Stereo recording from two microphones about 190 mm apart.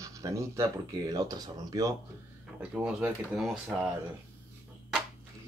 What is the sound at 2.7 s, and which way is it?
Speech, 5° right (ahead or behind).